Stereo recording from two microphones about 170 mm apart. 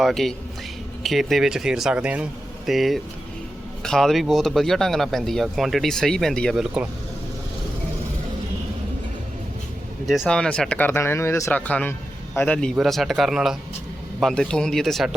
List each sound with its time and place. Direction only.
0.0 s speech: centre (ahead or behind)
10.1 s speech: centre (ahead or behind)